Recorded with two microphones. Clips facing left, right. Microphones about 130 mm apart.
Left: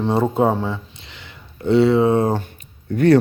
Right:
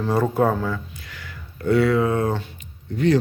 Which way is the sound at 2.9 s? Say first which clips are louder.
Left 5 dB; 60° left (ahead or behind).